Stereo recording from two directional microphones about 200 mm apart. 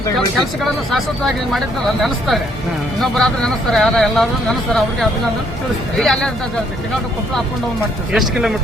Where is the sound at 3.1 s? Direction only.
Centre (ahead or behind).